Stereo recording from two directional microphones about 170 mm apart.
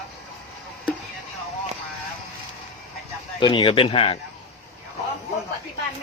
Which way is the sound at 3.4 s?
30° left (ahead or behind).